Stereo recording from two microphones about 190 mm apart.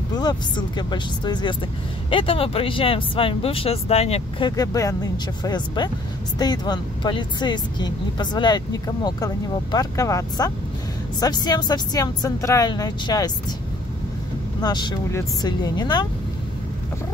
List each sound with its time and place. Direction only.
0.1 s speech: 20° left (ahead or behind)
14.6 s speech: 20° left (ahead or behind)